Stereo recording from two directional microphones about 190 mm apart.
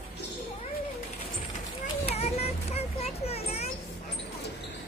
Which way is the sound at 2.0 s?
35° left (ahead or behind).